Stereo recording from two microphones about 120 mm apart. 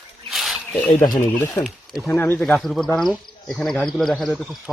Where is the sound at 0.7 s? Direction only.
15° left (ahead or behind).